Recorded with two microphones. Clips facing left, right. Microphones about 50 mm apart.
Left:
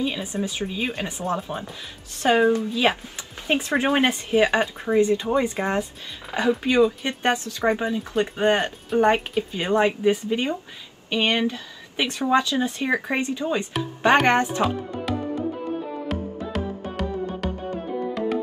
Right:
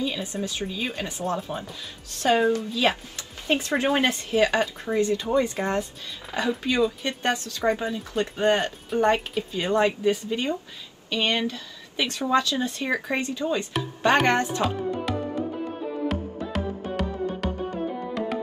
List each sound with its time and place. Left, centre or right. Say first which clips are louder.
0.0 s speech: left 2 dB; centre
14.6 s music: left 1 dB; centre